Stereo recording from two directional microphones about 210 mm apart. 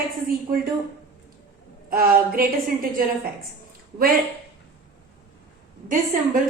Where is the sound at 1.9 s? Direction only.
45° right (ahead or behind).